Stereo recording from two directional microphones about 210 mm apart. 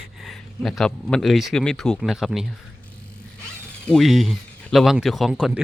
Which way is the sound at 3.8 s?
Centre (ahead or behind).